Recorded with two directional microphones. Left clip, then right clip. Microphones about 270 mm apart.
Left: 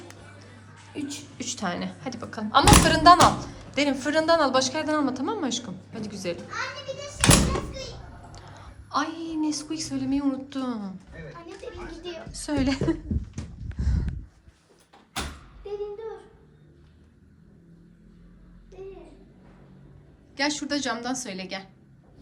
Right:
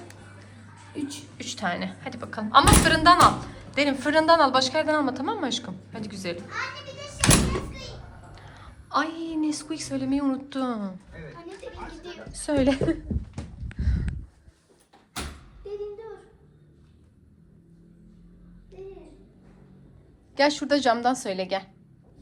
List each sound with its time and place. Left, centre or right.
0.9 s a woman's voice: centre
8.3 s a woman's voice: centre
12.0 s a woman's voice: centre
13.7 s a sound: centre
15.1 s door: centre
18.7 s a sound: centre
20.3 s a woman's voice: centre